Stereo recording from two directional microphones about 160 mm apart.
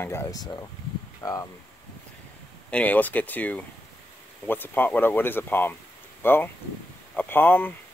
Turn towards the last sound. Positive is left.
turn(degrees=10)  # may be behind; listen again after turning